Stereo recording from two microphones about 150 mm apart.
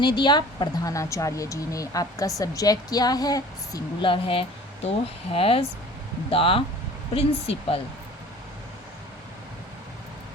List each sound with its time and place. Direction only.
0.0 s a woman's voice: 30° left (ahead or behind)
4.1 s speech: 35° left (ahead or behind)